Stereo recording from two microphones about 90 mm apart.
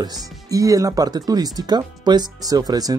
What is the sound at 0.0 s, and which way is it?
Speech, 40° right (ahead or behind).